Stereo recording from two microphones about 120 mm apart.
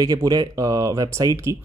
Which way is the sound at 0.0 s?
30° right (ahead or behind).